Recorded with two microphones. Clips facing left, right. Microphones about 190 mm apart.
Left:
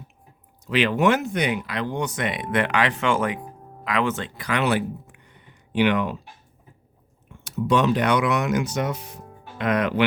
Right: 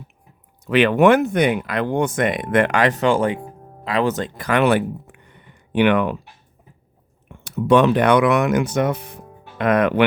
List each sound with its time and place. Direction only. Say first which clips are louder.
0.6 s speech: right 6 dB; 55° right (ahead or behind)
7.3 s speech: right 6 dB; 60° right (ahead or behind)